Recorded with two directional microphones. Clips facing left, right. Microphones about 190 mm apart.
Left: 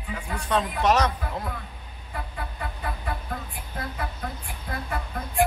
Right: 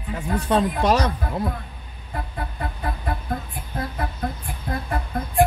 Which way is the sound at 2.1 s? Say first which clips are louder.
Right 4 dB; 40° right (ahead or behind).